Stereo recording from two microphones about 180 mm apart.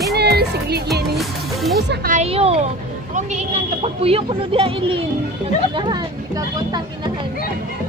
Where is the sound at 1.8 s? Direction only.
65° right (ahead or behind).